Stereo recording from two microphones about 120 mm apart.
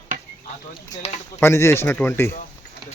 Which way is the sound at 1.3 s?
20° left (ahead or behind).